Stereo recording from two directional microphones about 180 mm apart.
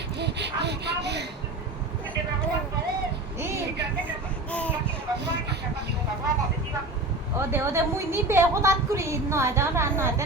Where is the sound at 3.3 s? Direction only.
15° right (ahead or behind).